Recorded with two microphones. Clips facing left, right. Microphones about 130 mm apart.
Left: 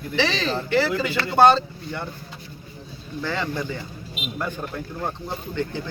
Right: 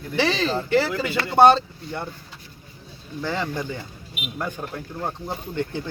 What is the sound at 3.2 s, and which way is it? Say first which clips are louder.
Speech: even; 15° right (ahead or behind).